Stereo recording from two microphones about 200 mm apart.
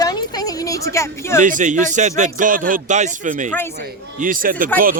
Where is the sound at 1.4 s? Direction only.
40° right (ahead or behind).